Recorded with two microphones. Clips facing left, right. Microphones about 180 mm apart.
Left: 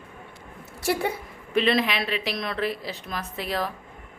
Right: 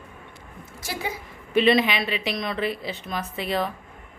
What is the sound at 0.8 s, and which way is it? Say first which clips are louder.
Speech: left 6 dB; 60° left (ahead or behind).